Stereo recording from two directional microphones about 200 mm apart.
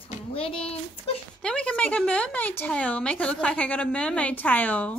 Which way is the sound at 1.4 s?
5° left (ahead or behind).